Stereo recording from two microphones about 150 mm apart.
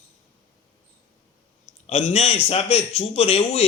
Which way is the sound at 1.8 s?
45° left (ahead or behind).